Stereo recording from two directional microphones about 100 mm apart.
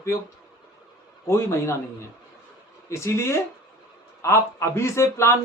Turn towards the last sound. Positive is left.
turn(degrees=25)  # may be behind; listen again after turning